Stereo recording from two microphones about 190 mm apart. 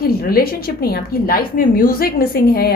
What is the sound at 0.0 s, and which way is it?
A woman's voice, 50° left (ahead or behind).